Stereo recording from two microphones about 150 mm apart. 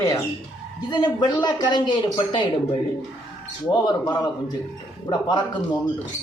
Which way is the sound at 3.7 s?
30° left (ahead or behind).